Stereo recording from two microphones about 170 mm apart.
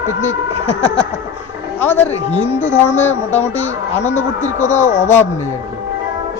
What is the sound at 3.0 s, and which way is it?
Speech, 10° left (ahead or behind).